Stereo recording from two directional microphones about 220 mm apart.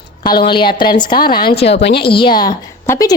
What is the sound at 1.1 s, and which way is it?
Speech, 45° left (ahead or behind).